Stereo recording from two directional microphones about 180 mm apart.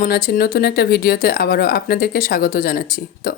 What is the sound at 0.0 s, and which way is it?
Speech, 55° left (ahead or behind).